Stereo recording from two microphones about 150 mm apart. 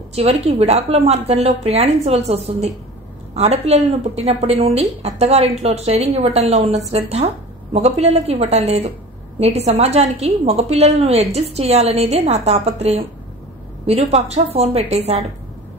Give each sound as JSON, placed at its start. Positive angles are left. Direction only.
{"t": 0.1, "sound": "a woman's voice", "side_deg": -40}